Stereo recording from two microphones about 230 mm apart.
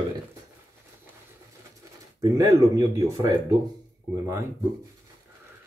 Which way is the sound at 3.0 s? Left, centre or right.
Centre.